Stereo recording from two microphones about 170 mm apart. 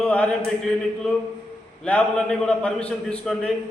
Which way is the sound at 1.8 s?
5° left (ahead or behind).